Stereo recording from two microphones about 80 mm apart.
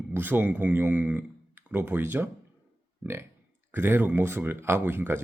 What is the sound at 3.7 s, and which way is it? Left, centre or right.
Speech, right.